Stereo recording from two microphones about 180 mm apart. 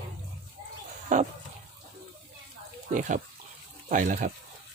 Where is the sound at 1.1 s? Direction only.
45° right (ahead or behind).